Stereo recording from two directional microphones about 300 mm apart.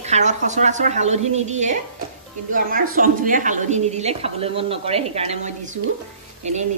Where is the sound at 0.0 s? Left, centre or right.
Right.